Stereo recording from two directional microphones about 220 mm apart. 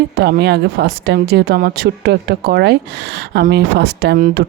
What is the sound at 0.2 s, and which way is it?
Speech, 50° right (ahead or behind).